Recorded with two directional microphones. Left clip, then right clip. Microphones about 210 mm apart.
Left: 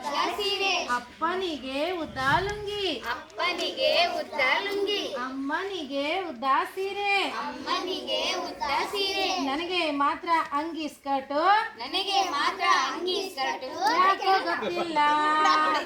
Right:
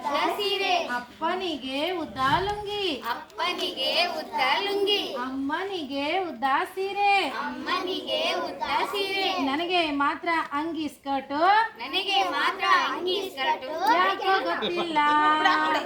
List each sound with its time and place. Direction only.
0.1 s a sound: 20° right (ahead or behind)
3.1 s speech: 50° right (ahead or behind)
6.0 s a woman's voice: 20° right (ahead or behind)
11.9 s a child's voice: centre (ahead or behind)